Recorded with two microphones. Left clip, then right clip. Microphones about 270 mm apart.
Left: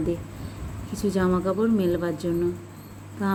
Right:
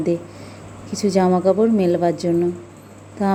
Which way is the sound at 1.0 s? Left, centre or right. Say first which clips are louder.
Right 8 dB; centre.